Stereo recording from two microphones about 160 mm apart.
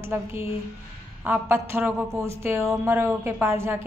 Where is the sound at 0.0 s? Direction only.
15° right (ahead or behind).